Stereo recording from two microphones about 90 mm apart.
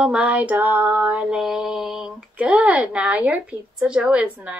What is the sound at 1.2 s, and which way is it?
Mantra, 5° right (ahead or behind).